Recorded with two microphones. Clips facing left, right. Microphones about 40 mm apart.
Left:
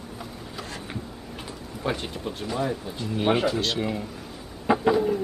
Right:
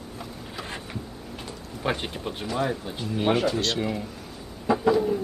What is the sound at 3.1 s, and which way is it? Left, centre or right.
Speech, centre.